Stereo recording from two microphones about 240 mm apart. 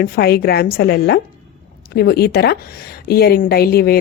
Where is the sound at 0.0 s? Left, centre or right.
Left.